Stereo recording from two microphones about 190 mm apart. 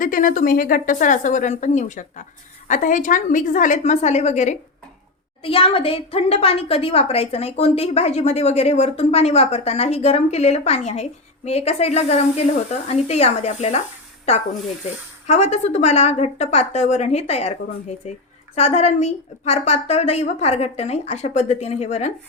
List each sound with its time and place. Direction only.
0.0 s a woman's voice: 45° left (ahead or behind)
15.3 s a woman's voice: 35° left (ahead or behind)